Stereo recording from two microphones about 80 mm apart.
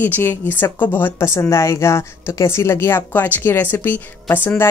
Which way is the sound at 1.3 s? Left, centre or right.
Left.